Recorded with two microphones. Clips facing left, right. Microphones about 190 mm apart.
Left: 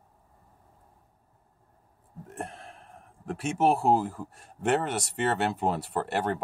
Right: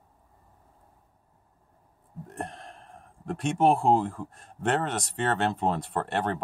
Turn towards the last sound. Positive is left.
turn(degrees=10)  # may be behind; listen again after turning